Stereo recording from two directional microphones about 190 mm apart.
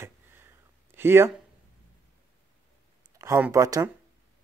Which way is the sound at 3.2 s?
15° right (ahead or behind).